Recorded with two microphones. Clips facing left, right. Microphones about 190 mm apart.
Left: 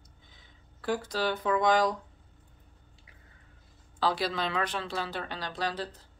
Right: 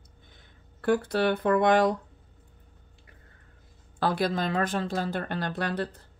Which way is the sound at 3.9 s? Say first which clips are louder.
Right 3 dB; 55° right (ahead or behind).